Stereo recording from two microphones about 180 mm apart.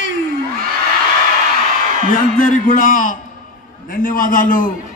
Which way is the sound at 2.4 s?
50° left (ahead or behind).